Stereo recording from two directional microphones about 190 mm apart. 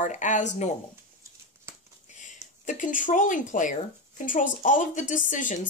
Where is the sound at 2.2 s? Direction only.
40° left (ahead or behind).